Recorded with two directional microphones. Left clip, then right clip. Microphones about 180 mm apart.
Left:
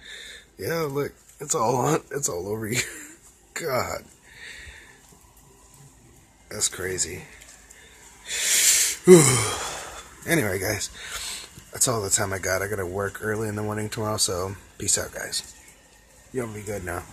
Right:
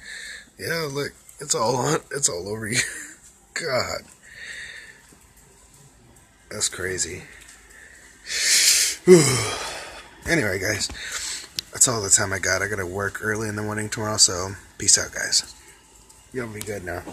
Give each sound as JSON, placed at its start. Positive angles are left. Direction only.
{"t": 0.0, "sound": "speech", "side_deg": 10}
{"t": 3.5, "sound": "a sound", "side_deg": 5}
{"t": 6.5, "sound": "speech", "side_deg": -5}
{"t": 8.7, "sound": "a sound", "side_deg": 25}
{"t": 10.2, "sound": "speech", "side_deg": 20}
{"t": 16.3, "sound": "speech", "side_deg": 15}